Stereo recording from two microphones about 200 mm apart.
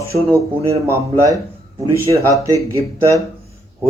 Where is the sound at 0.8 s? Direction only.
15° right (ahead or behind).